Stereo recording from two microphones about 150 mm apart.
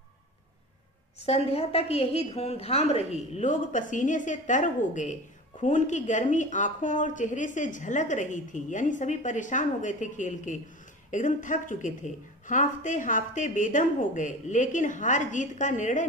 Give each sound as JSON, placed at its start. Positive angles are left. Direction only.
{"t": 1.2, "sound": "a woman's voice", "side_deg": 45}